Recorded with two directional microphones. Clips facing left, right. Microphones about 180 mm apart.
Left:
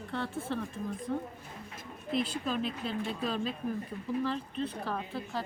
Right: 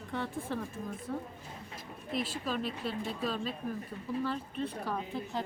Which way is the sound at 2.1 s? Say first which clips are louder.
Left 3 dB; centre (ahead or behind).